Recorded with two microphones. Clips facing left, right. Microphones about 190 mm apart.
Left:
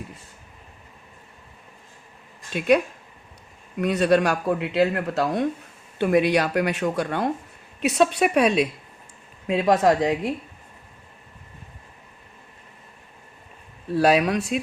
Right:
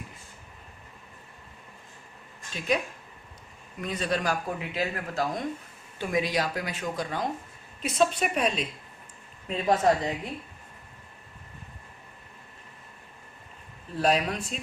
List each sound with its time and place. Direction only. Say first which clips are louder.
2.5 s a woman's voice: left 9 dB; 65° left (ahead or behind); by 10.3 s 85° left
13.9 s speech: left 7 dB; 75° left (ahead or behind)